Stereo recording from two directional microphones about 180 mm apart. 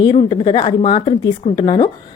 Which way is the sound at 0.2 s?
30° left (ahead or behind).